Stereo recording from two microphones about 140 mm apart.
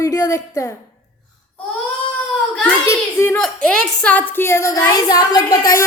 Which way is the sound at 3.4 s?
5° left (ahead or behind).